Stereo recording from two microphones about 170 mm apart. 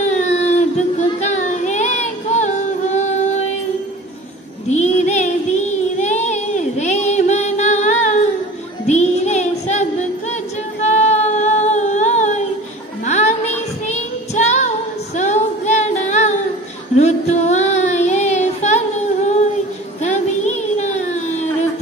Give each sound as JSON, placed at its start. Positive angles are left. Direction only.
{"t": 0.0, "sound": "child singing", "side_deg": 45}
{"t": 4.6, "sound": "child singing", "side_deg": 45}
{"t": 10.8, "sound": "a sound", "side_deg": 45}
{"t": 13.0, "sound": "music", "side_deg": 45}
{"t": 13.8, "sound": "child singing", "side_deg": 45}
{"t": 15.1, "sound": "female singing", "side_deg": 45}
{"t": 16.9, "sound": "child singing", "side_deg": 40}
{"t": 20.0, "sound": "child singing", "side_deg": 40}